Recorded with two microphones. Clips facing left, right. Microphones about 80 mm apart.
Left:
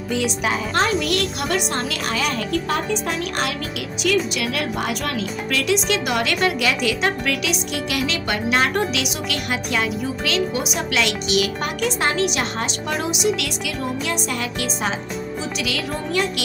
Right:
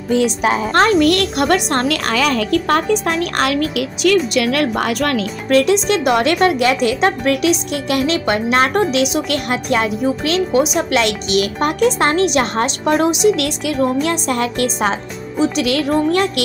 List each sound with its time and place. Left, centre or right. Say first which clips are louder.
0.1 s a woman's voice: right 7 dB; right
0.7 s a woman's voice: right 9 dB; right
5.5 s a woman's voice: right 8 dB; right